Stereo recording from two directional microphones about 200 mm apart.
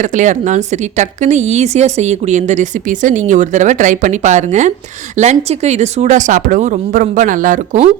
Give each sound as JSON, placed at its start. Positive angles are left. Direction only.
{"t": 0.0, "sound": "speech", "side_deg": -40}